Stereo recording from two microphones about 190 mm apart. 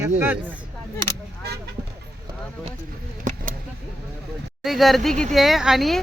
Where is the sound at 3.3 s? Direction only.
40° right (ahead or behind).